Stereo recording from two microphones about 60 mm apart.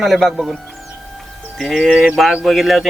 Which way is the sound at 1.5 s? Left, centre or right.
Centre.